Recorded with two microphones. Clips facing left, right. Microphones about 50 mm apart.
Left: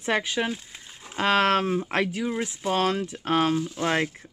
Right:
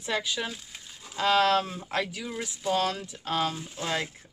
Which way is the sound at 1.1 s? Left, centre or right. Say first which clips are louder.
Left 2 dB; left.